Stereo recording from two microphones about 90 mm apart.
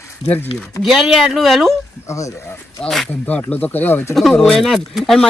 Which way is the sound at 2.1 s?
35° left (ahead or behind).